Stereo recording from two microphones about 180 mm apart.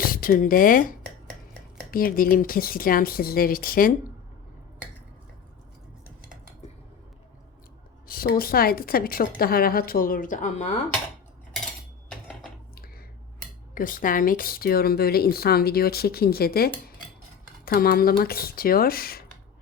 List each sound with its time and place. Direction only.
0.0 s speech: 55° left (ahead or behind)
8.0 s speech: 55° left (ahead or behind)
13.7 s speech: 50° left (ahead or behind)